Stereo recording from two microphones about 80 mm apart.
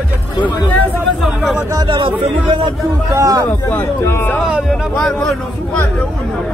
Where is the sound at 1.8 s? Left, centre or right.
Right.